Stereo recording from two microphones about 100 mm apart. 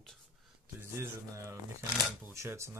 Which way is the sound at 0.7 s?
25° right (ahead or behind).